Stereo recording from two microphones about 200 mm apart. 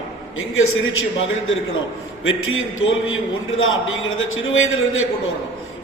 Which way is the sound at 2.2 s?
90° left.